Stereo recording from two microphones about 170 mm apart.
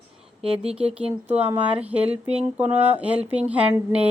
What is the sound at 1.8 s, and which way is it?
Speech, 10° right (ahead or behind).